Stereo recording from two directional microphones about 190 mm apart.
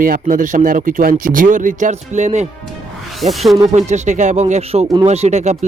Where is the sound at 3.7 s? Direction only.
35° right (ahead or behind).